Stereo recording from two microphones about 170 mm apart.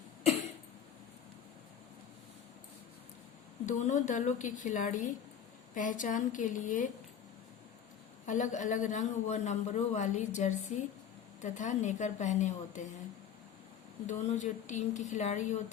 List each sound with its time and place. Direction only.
3.7 s a man's voice: 45° left (ahead or behind)
8.3 s a man's voice: 50° left (ahead or behind)
14.1 s a man's voice: 45° left (ahead or behind)